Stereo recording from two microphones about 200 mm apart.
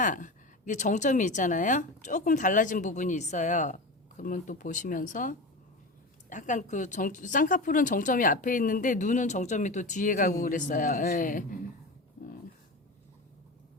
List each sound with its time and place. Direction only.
0.0 s a woman's voice: 40° left (ahead or behind)
6.3 s a woman's voice: 40° left (ahead or behind)